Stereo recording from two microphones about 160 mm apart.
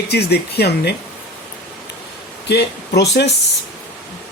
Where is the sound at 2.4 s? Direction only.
90° left.